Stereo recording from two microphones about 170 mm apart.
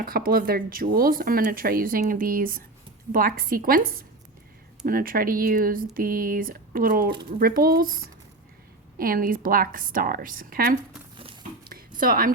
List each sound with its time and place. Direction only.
0.0 s speech: 60° right (ahead or behind)
9.0 s speech: 55° right (ahead or behind)
11.9 s speech: 55° right (ahead or behind)